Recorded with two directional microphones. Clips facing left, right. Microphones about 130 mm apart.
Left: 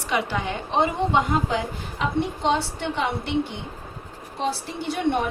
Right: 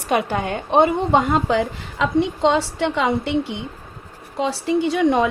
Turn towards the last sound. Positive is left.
turn(degrees=-90)